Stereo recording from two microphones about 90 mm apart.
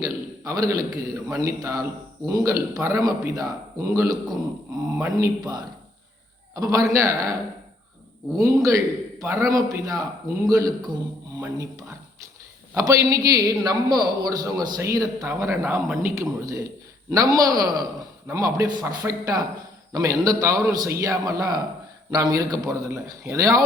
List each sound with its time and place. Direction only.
0.0 s a man's voice: 40° right (ahead or behind)
6.5 s a man's voice: 40° right (ahead or behind)
8.4 s a man's voice: 40° right (ahead or behind)